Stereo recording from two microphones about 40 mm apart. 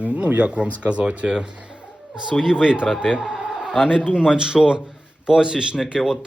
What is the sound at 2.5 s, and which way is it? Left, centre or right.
Speech, centre.